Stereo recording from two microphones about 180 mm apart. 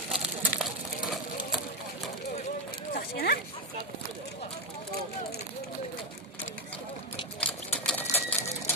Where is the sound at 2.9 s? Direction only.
60° left (ahead or behind).